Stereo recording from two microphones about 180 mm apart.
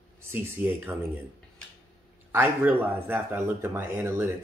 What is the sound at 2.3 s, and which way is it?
Speech, 10° right (ahead or behind).